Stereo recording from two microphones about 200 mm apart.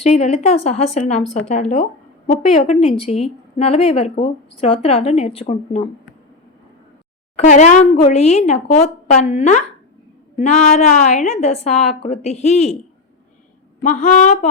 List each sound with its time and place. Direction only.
0.0 s a woman's voice: 30° left (ahead or behind)
7.3 s a woman's voice: 35° left (ahead or behind)
13.8 s a woman's voice: 40° left (ahead or behind)